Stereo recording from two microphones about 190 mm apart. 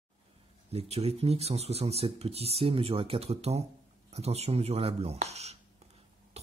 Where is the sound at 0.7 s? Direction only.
35° right (ahead or behind).